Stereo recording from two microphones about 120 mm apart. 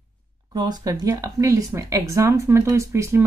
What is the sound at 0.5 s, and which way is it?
Speech, 35° right (ahead or behind).